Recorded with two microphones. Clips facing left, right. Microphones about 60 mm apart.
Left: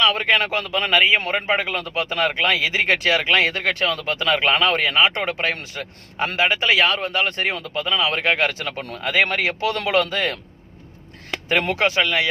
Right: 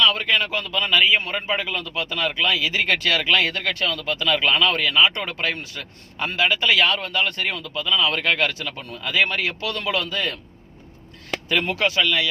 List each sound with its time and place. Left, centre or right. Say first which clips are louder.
0.0 s speech: left 2 dB; left
2.7 s speech: left 2 dB; left
9.0 s speech: left 2 dB; left
9.7 s speech: left 4 dB; left
11.8 s speech: left 2 dB; left